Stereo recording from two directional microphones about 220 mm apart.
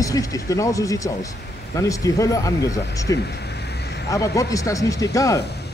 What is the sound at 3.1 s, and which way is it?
Vehicle, 50° left (ahead or behind).